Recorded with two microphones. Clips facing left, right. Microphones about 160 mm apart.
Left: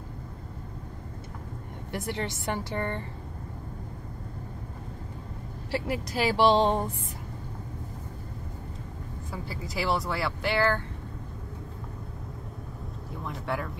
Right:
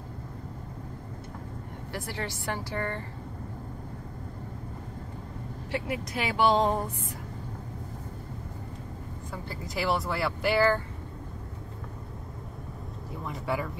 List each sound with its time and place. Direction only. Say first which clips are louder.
1.9 s a woman's voice: left 3 dB; 20° left (ahead or behind)
5.7 s speech: left 2 dB; 35° left (ahead or behind)
9.3 s speech: even; 5° left (ahead or behind)
13.1 s speech: right 1 dB; centre (ahead or behind)